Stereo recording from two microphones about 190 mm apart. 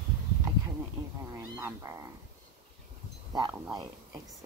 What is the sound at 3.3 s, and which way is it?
Speech, 20° right (ahead or behind).